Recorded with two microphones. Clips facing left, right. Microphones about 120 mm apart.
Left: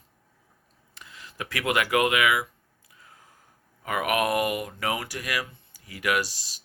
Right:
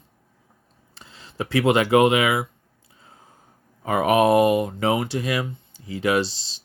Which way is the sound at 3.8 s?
30° right (ahead or behind).